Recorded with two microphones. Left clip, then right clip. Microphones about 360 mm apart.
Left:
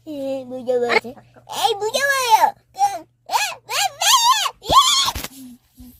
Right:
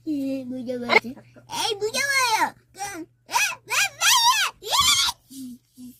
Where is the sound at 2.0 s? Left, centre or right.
Left.